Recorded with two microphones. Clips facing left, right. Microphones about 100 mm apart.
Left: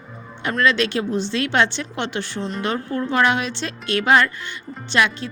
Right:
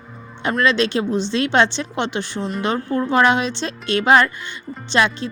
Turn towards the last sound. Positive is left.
turn(degrees=-25)  # may be behind; listen again after turning